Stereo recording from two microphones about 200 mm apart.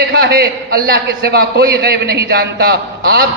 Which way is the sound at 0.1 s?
50° right (ahead or behind).